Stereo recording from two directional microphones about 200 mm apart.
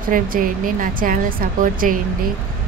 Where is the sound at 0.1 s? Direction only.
45° right (ahead or behind).